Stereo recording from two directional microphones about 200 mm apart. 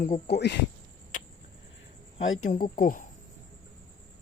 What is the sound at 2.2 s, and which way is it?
Speech, 90° left.